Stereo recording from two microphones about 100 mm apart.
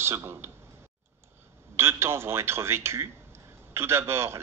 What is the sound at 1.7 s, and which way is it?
Speech, 25° right (ahead or behind).